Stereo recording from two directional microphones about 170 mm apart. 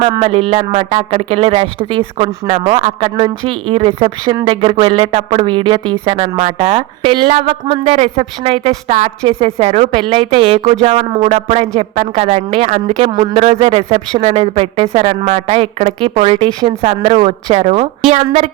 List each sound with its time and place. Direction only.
0.0 s a woman's voice: 30° right (ahead or behind)